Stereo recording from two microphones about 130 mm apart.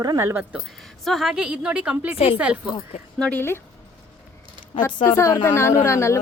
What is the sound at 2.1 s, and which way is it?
Speech, 50° left (ahead or behind).